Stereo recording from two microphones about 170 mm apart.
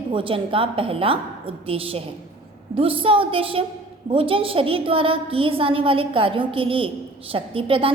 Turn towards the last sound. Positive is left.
turn(degrees=-35)  # may be behind; listen again after turning